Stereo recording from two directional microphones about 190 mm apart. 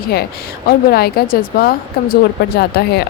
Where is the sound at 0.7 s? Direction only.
55° left (ahead or behind).